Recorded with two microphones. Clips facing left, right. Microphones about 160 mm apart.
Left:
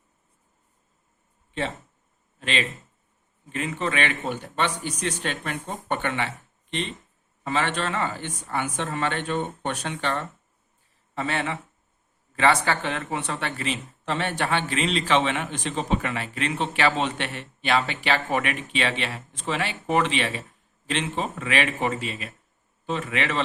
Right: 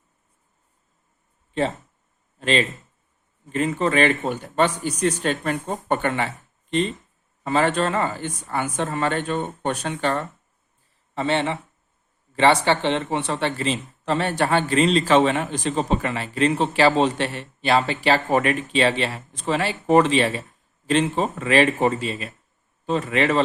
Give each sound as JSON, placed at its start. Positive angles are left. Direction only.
{"t": 2.4, "sound": "speech", "side_deg": -40}
{"t": 11.1, "sound": "speech", "side_deg": -30}